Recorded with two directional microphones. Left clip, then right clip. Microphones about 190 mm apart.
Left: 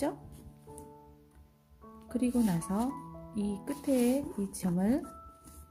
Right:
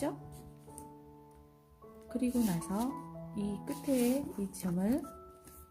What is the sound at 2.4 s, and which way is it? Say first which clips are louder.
Speech: left 3 dB; 15° left (ahead or behind).